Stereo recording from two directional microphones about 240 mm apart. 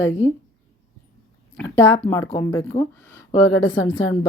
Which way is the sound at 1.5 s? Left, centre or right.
Centre.